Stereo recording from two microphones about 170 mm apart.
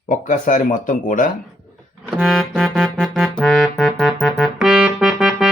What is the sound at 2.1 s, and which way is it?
Music, centre (ahead or behind).